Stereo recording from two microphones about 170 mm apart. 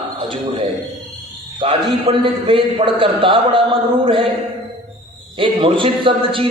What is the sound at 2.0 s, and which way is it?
A man's voice, 30° right (ahead or behind).